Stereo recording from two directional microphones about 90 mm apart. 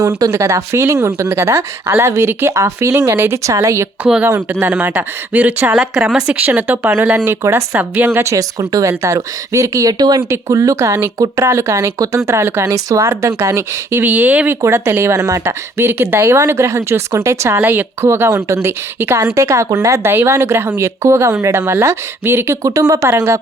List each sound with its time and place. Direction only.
0.2 s speech: 35° right (ahead or behind)
4.6 s speech: 20° right (ahead or behind)
7.3 s speech: 30° right (ahead or behind); by 10.2 s 45° right (ahead or behind)
10.2 s speech: 35° right (ahead or behind)
14.0 s speech: 15° right (ahead or behind)
14.6 s speech: 30° right (ahead or behind)